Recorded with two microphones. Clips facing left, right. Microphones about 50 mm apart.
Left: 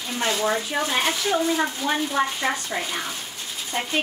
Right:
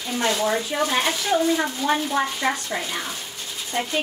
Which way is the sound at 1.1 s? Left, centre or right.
Centre.